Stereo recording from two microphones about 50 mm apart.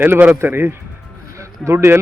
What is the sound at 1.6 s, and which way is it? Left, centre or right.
Speech, centre.